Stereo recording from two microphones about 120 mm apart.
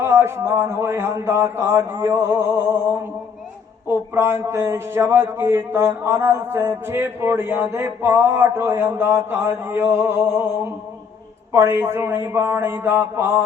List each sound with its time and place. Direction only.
0.0 s speech: 20° right (ahead or behind)
11.5 s speech: 20° right (ahead or behind)